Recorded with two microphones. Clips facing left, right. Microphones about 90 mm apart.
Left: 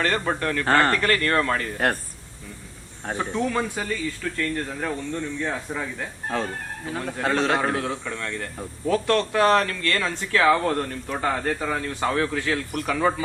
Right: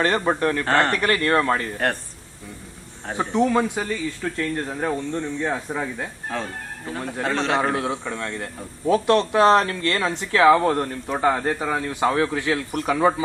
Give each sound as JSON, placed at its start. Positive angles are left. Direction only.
{"t": 0.0, "sound": "speech", "side_deg": -20}
{"t": 3.2, "sound": "speech", "side_deg": -20}
{"t": 6.3, "sound": "speech", "side_deg": 0}
{"t": 7.8, "sound": "speech", "side_deg": -20}